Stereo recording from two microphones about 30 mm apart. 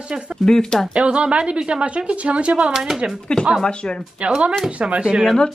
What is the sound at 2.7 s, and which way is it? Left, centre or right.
Speech, centre.